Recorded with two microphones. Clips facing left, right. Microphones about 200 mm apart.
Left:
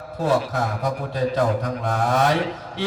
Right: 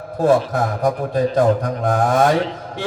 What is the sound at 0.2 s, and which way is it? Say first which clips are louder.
A man's voice: right 6 dB; 50° right (ahead or behind).